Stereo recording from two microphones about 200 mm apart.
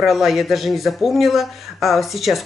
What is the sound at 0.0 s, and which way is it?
Speech, centre (ahead or behind).